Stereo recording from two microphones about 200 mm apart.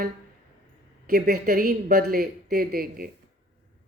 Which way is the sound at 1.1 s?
50° right (ahead or behind).